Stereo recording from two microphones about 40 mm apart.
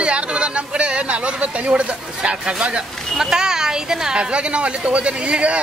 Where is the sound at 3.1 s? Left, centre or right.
Centre.